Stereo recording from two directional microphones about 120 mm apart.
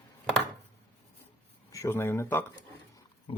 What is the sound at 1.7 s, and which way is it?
Speech, 25° left (ahead or behind).